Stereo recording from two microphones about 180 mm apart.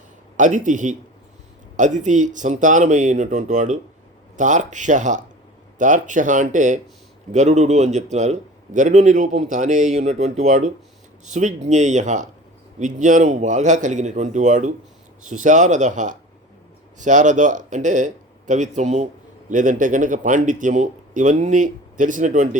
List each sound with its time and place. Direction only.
0.3 s a man's voice: 45° right (ahead or behind)